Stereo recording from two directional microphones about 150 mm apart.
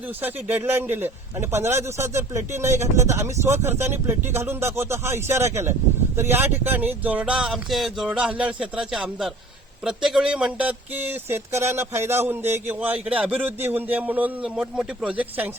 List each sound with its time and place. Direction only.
0.2 s speech: 15° right (ahead or behind)